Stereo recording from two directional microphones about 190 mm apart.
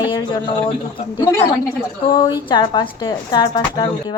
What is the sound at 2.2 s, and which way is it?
A woman's voice, 25° left (ahead or behind).